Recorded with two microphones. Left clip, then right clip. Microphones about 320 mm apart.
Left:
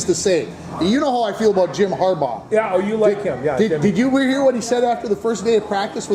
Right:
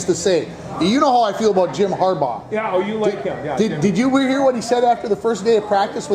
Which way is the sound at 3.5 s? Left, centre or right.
Centre.